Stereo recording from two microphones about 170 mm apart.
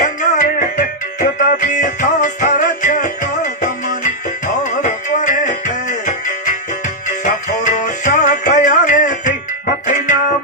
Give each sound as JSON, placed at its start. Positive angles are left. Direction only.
{"t": 0.0, "sound": "music", "side_deg": 50}
{"t": 4.6, "sound": "music", "side_deg": 45}